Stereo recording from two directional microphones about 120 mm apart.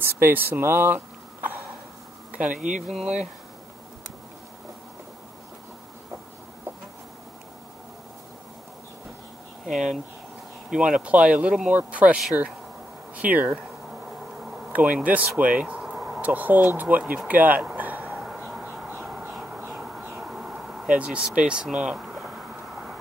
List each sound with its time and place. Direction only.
0.0 s speech: 20° right (ahead or behind)
2.5 s speech: 90° right
2.9 s speech: 5° right (ahead or behind)
10.7 s speech: 5° right (ahead or behind)
14.7 s speech: 10° right (ahead or behind)
17.3 s a sound: 15° right (ahead or behind)
20.2 s owl: 5° right (ahead or behind)